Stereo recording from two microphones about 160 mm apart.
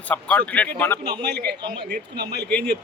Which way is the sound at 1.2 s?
90° right.